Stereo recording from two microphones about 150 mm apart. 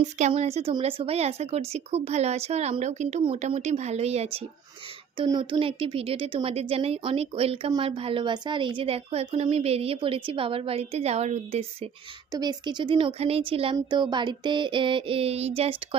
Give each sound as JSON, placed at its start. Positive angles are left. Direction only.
{"t": 0.0, "sound": "speech", "side_deg": -50}
{"t": 5.1, "sound": "a woman's voice", "side_deg": -30}
{"t": 12.3, "sound": "a woman's voice", "side_deg": -25}